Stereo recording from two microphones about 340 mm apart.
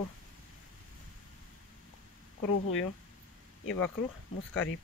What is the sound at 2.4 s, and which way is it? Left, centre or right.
Speech, left.